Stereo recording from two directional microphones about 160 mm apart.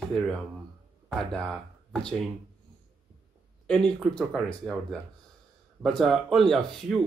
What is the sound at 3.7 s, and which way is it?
Speech, 5° left (ahead or behind).